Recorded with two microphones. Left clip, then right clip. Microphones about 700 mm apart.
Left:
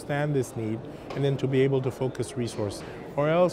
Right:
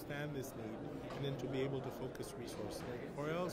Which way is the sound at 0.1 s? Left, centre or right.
Left.